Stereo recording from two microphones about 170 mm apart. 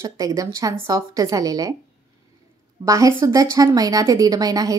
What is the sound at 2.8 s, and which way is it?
Speech, 20° right (ahead or behind).